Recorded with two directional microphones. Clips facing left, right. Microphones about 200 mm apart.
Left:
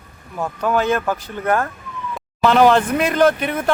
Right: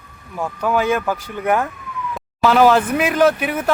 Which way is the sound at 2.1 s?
Centre (ahead or behind).